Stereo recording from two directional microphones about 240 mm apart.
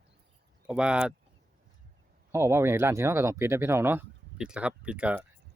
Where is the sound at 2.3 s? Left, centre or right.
Centre.